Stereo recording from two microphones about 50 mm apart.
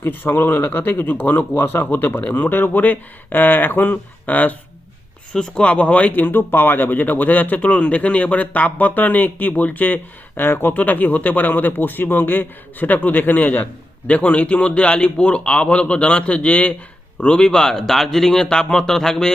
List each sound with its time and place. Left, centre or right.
0.0 s speech: left
5.3 s speech: centre; by 10.8 s left
10.8 s a man's voice: left; by 19.3 s centre